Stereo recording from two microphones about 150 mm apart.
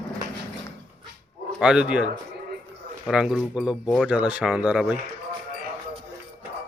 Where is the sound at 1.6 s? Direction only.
5° right (ahead or behind).